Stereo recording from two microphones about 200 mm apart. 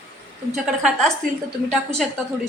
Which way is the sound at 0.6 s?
5° right (ahead or behind).